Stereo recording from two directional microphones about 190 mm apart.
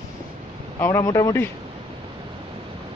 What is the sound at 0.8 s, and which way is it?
Speech, 15° left (ahead or behind).